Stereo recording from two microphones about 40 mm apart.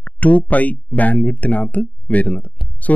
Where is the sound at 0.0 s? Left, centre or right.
Left.